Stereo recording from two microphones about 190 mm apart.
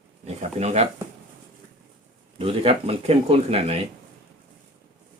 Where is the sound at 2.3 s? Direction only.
30° right (ahead or behind).